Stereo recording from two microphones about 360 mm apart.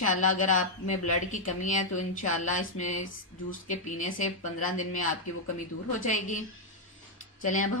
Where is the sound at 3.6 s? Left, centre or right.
Left.